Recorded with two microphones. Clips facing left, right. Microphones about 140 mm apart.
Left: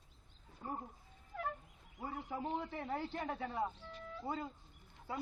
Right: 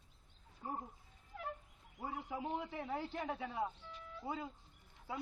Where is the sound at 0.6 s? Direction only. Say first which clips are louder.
Even; 70° left (ahead or behind).